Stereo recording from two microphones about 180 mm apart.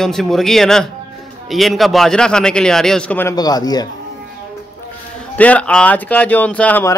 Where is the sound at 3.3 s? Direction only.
20° left (ahead or behind).